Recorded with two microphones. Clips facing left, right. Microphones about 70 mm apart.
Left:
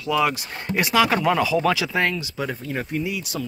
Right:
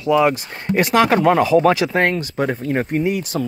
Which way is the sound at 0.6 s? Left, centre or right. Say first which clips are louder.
Right 5 dB; right.